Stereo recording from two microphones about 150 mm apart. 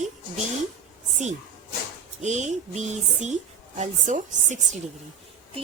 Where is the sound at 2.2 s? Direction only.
50° right (ahead or behind).